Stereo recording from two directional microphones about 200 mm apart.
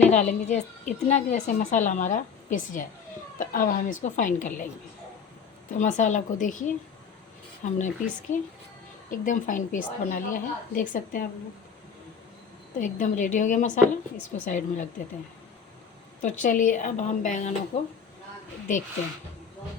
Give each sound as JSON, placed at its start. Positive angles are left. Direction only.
{"t": 0.1, "sound": "a woman's voice", "side_deg": 35}
{"t": 5.7, "sound": "a woman's voice", "side_deg": 40}
{"t": 12.8, "sound": "a woman's voice", "side_deg": 40}
{"t": 16.2, "sound": "a woman's voice", "side_deg": 40}